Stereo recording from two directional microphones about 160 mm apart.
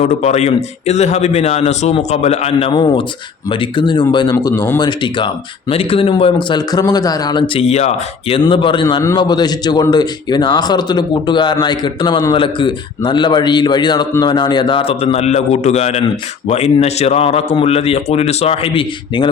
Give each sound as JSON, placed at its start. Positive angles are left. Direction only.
{"t": 0.0, "sound": "a man's voice", "side_deg": 45}
{"t": 8.4, "sound": "a man's voice", "side_deg": 30}